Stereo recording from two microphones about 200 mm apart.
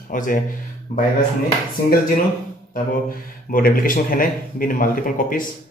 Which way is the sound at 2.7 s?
45° left (ahead or behind).